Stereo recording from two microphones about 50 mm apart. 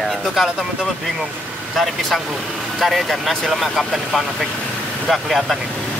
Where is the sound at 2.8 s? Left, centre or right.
Centre.